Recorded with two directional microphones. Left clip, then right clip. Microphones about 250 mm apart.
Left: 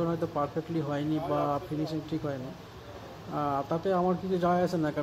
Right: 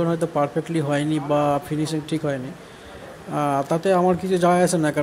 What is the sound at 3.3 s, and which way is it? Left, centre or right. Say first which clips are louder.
Speech: right 8 dB; right.